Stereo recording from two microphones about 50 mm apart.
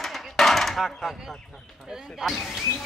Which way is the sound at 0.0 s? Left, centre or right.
Centre.